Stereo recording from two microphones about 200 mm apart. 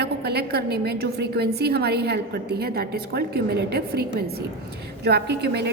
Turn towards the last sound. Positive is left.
turn(degrees=-55)  # may be behind; listen again after turning